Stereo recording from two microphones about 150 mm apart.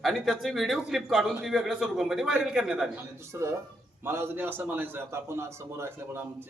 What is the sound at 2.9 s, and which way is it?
A man's voice, 20° right (ahead or behind).